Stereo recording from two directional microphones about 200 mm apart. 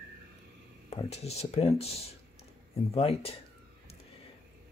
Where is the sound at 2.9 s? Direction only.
30° left (ahead or behind).